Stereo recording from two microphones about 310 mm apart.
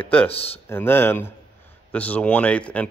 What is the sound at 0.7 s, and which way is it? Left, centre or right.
Speech, centre.